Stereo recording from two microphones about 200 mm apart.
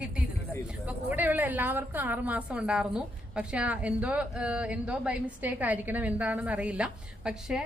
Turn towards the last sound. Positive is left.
turn(degrees=-5)  # may be behind; listen again after turning